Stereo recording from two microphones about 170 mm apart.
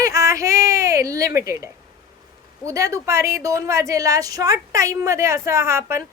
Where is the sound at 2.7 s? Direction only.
20° right (ahead or behind).